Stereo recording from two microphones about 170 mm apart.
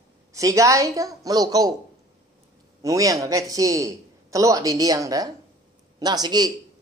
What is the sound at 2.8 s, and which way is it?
A man's voice, 20° right (ahead or behind).